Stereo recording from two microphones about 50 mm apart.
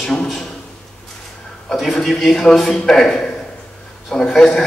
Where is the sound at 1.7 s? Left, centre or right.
Centre.